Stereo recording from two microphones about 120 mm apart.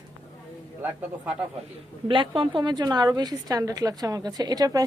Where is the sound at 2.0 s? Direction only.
45° right (ahead or behind).